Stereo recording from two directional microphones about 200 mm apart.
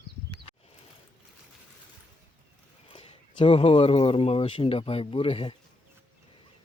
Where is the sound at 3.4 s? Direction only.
25° left (ahead or behind).